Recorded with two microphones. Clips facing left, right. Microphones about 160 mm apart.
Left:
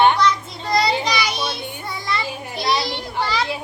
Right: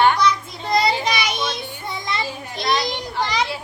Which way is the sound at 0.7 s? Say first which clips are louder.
Even; 20° right (ahead or behind).